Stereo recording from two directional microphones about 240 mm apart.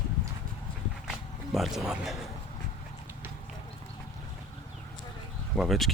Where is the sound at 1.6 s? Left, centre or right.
Centre.